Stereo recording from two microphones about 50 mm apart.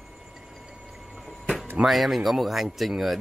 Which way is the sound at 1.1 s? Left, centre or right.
Centre.